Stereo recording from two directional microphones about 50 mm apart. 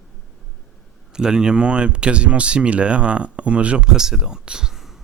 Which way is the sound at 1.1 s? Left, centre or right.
Centre.